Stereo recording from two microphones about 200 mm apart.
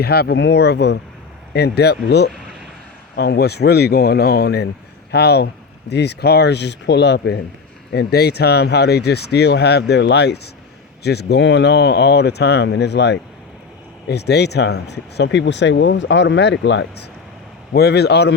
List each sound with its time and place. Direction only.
0.0 s speech: 50° left (ahead or behind)